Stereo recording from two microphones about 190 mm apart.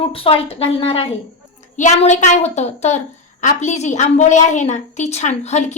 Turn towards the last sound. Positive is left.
turn(degrees=35)  # may be behind; listen again after turning